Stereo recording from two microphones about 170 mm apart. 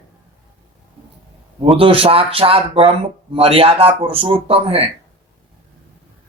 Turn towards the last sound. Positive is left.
turn(degrees=-35)  # may be behind; listen again after turning